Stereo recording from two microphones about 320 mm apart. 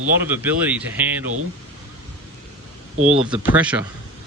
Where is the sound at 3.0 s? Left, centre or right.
Right.